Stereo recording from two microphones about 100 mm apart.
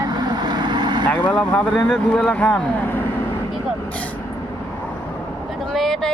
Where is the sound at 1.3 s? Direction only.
15° left (ahead or behind).